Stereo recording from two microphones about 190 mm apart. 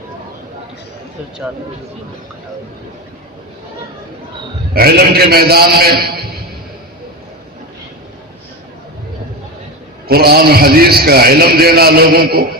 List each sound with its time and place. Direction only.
4.7 s a man's voice: 55° right (ahead or behind)
10.1 s a man's voice: 55° right (ahead or behind)